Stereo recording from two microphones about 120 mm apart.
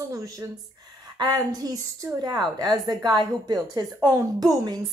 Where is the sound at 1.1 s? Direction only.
35° right (ahead or behind).